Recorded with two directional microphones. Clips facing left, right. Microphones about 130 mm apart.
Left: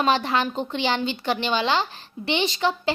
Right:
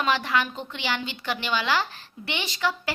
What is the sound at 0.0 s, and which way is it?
A woman's voice, 30° left (ahead or behind).